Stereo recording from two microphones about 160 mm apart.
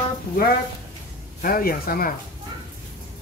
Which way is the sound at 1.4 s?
65° left (ahead or behind).